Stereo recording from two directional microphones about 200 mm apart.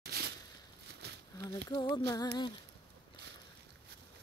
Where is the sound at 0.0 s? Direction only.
55° right (ahead or behind).